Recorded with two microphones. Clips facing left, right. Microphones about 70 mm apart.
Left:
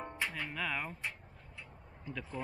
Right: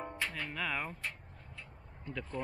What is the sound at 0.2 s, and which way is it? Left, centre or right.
Music, centre.